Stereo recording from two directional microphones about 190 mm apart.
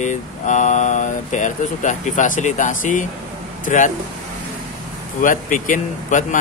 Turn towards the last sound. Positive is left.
turn(degrees=40)  # may be behind; listen again after turning